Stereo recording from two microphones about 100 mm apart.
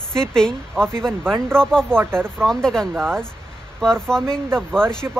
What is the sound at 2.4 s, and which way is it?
Speech, 5° left (ahead or behind).